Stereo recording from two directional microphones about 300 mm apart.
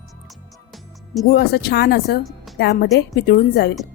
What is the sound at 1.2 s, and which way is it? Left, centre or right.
A woman's voice, left.